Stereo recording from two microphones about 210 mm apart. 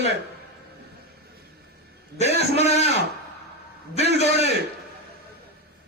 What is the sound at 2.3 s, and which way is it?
Speech, 30° left (ahead or behind).